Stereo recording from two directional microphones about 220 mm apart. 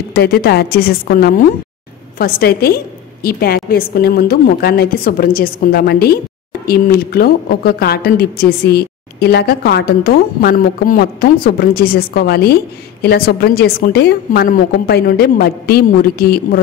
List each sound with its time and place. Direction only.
0.1 s a woman's voice: 45° left (ahead or behind)